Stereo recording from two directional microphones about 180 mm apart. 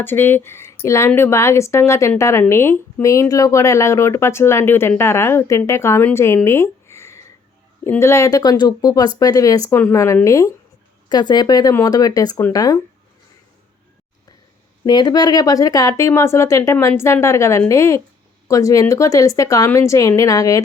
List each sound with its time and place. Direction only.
0.0 s a woman's voice: 10° left (ahead or behind)
14.8 s a woman's voice: 25° left (ahead or behind)